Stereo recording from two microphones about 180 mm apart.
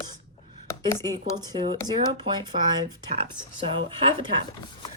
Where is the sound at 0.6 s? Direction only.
15° left (ahead or behind).